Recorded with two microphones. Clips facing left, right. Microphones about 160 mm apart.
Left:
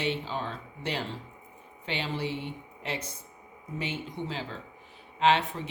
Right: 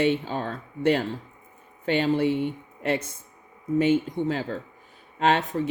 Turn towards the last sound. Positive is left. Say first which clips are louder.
# right 3 dB
turn(degrees=-45)  # may be behind; listen again after turning